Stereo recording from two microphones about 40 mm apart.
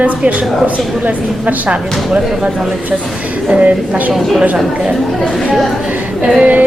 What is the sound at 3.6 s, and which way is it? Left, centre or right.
Speech, right.